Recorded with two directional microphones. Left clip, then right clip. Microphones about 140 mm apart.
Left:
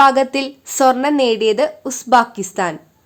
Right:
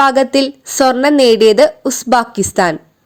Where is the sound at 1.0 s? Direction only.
35° right (ahead or behind).